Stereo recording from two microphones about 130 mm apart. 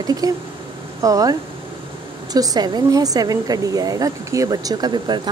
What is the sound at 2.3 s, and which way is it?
A woman's voice, 30° right (ahead or behind).